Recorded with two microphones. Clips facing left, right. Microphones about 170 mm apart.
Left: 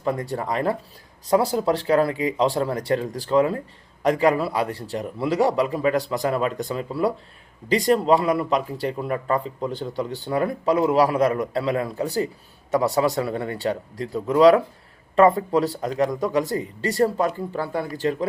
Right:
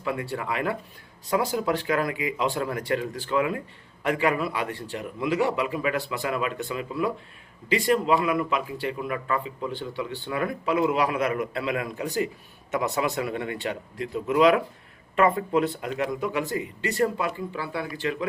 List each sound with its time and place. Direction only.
0.0 s speech: 40° left (ahead or behind)